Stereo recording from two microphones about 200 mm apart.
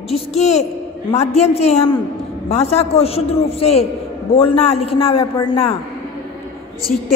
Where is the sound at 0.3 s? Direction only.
35° left (ahead or behind).